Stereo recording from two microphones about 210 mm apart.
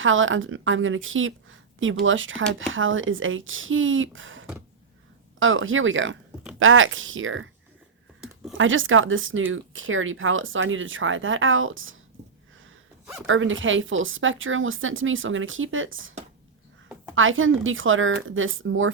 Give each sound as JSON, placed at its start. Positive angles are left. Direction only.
{"t": 0.0, "sound": "speech", "side_deg": -65}
{"t": 8.5, "sound": "speech", "side_deg": -65}
{"t": 13.2, "sound": "speech", "side_deg": -70}
{"t": 17.2, "sound": "speech", "side_deg": -70}